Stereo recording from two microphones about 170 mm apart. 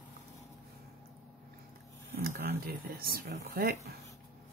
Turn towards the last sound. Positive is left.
turn(degrees=-65)  # may be behind; listen again after turning